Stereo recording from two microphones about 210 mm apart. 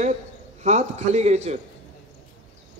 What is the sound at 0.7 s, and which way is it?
Speech, 35° right (ahead or behind).